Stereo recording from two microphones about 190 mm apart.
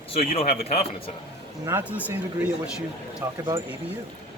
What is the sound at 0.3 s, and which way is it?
Speech, 30° left (ahead or behind).